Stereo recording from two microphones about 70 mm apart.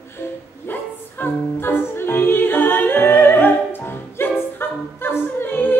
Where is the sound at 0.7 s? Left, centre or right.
Left.